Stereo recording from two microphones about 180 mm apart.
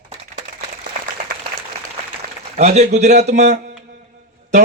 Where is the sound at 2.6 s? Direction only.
40° right (ahead or behind).